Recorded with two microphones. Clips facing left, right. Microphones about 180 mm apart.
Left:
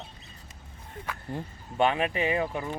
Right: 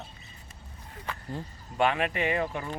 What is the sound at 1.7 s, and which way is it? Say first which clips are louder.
Speech: left 1 dB; 20° left (ahead or behind).